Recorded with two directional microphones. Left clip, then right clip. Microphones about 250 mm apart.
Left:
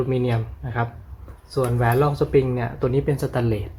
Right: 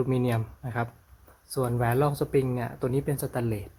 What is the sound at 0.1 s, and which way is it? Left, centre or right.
Speech, right.